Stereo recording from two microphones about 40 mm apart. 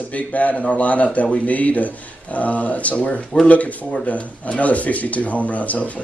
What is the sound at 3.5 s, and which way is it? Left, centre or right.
A man's voice, left.